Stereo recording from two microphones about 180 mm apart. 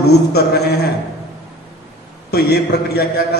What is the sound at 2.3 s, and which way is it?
Speech, 65° left (ahead or behind).